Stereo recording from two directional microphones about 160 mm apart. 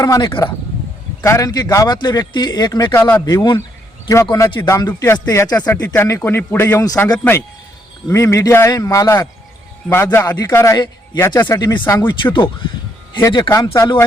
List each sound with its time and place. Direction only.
0.0 s speech: 25° left (ahead or behind)
2.9 s speech: 15° left (ahead or behind)
3.2 s speech: 25° left (ahead or behind)
5.5 s speech: 10° left (ahead or behind)
11.3 s speech: 10° left (ahead or behind)
11.6 s speech: 25° left (ahead or behind)